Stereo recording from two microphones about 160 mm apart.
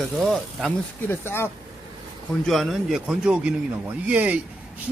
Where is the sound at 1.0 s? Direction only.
15° left (ahead or behind).